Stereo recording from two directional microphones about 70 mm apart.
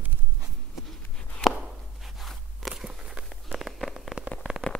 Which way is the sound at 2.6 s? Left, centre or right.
Centre.